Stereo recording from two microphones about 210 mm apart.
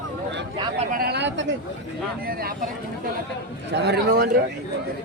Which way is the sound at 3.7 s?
50° right (ahead or behind).